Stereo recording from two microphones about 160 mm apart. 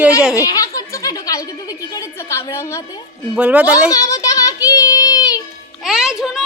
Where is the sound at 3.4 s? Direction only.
10° right (ahead or behind).